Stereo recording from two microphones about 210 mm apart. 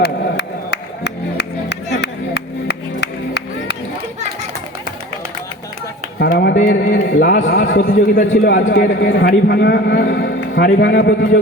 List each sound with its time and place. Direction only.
0.0 s music: 55° left (ahead or behind)
6.1 s a sound: 55° left (ahead or behind)
7.3 s a man's voice: 65° left (ahead or behind)
7.8 s a man's voice: 40° left (ahead or behind)
8.3 s a man's voice: 60° left (ahead or behind)